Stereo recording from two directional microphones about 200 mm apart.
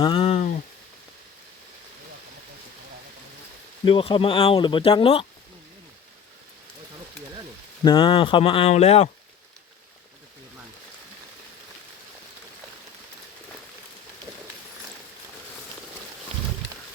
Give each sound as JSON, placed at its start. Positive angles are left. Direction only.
{"t": 0.0, "sound": "a sound", "side_deg": 25}
{"t": 3.8, "sound": "speech", "side_deg": 25}
{"t": 7.9, "sound": "speech", "side_deg": 25}